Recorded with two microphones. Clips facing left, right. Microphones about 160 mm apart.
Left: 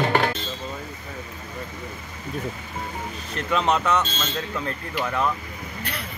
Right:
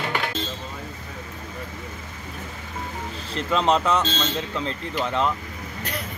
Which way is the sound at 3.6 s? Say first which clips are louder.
Right 2 dB; 30° right (ahead or behind).